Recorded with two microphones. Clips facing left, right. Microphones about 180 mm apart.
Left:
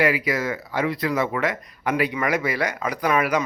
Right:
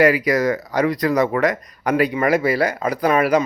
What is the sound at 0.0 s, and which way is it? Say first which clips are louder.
Speech: right 6 dB; 40° right (ahead or behind).